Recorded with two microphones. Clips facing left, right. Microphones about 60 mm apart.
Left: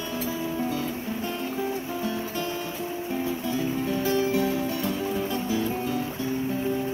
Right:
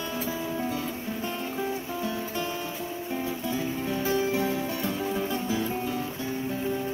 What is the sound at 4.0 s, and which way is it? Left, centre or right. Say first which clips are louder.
Music: left 1 dB; centre.